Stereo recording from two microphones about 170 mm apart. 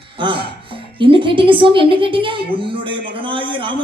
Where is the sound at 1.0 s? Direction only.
30° right (ahead or behind).